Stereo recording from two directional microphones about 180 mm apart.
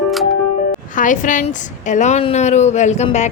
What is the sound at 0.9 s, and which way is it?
A woman's voice, 45° left (ahead or behind).